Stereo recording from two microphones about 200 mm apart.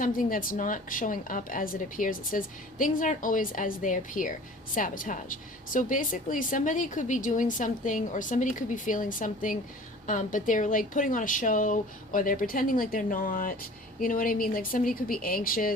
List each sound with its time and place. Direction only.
0.0 s a woman's voice: 45° left (ahead or behind)